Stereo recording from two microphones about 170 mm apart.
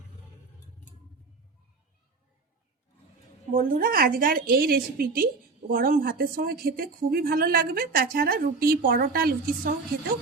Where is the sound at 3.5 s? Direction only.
55° right (ahead or behind).